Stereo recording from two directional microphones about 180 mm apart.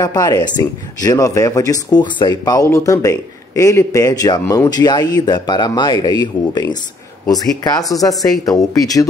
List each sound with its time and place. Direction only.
0.0 s speech: 20° left (ahead or behind)